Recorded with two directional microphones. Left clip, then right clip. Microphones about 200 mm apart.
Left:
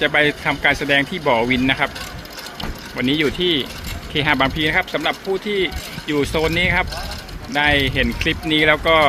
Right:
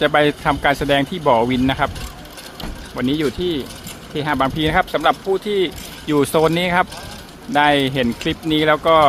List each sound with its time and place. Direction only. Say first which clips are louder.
0.0 s speech: right 1 dB; 15° right (ahead or behind)
2.9 s speech: left 1 dB; 5° right (ahead or behind)
4.5 s speech: right 1 dB; 20° right (ahead or behind)